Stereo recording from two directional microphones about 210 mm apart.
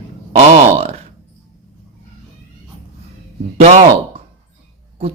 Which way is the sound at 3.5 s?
35° right (ahead or behind).